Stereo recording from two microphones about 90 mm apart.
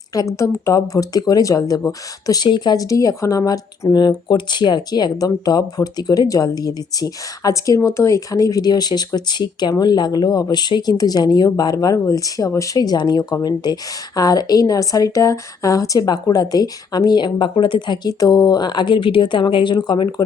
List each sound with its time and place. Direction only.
0.1 s speech: 40° left (ahead or behind); by 20.2 s 55° left (ahead or behind)